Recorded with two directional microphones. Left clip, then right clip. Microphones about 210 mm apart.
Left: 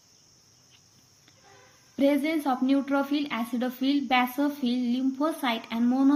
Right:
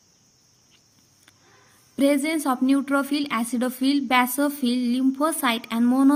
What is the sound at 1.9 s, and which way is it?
A woman's voice, 35° right (ahead or behind).